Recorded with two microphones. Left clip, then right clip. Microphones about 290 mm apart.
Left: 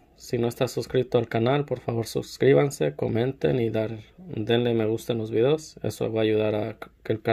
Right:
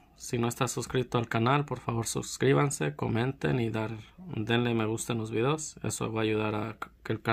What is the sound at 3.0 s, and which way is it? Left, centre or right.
Speech, right.